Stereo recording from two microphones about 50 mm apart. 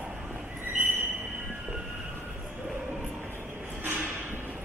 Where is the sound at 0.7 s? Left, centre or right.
Right.